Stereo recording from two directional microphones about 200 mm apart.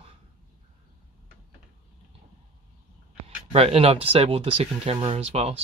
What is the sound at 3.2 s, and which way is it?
Speech, 30° right (ahead or behind).